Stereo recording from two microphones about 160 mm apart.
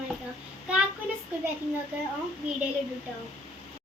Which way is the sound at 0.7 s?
5° right (ahead or behind).